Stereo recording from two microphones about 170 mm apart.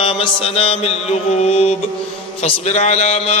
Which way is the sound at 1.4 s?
40° left (ahead or behind).